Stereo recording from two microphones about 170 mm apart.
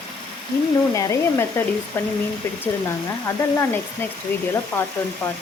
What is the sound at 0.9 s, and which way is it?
Sizzle, 15° left (ahead or behind).